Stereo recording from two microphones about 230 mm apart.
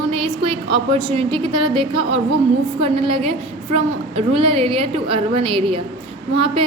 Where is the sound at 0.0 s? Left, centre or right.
Right.